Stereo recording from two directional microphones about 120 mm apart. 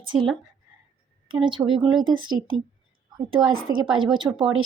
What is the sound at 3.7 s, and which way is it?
Speech, 30° right (ahead or behind).